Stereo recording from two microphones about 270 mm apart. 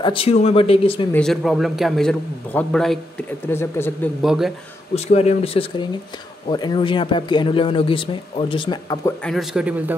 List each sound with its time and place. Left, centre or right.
0.0 s speech: centre
1.1 s a man's voice: centre
4.9 s speech: left; by 9.9 s centre